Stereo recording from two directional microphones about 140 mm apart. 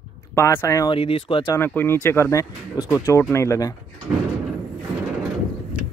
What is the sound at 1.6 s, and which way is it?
Speech, 15° left (ahead or behind).